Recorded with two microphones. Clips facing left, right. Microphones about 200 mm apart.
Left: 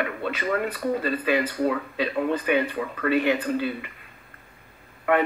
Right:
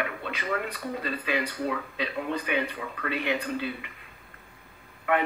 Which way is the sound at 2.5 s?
50° left (ahead or behind).